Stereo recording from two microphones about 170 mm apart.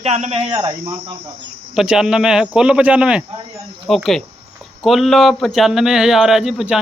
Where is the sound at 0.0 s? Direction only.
40° right (ahead or behind).